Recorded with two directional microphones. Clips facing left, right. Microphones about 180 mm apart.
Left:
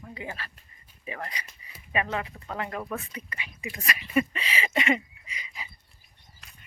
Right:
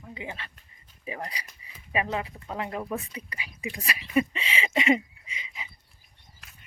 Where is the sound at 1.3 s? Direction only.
35° right (ahead or behind).